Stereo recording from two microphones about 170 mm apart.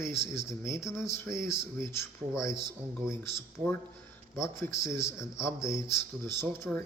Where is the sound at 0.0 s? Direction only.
15° left (ahead or behind).